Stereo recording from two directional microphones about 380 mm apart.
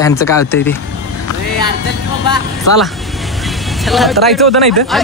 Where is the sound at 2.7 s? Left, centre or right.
Left.